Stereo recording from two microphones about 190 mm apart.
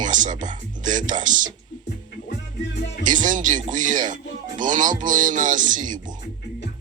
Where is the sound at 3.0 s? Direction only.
45° right (ahead or behind).